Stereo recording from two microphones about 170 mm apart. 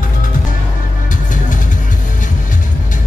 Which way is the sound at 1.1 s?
50° left (ahead or behind).